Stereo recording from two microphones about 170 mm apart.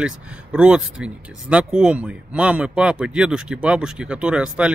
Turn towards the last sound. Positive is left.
turn(degrees=-5)  # may be behind; listen again after turning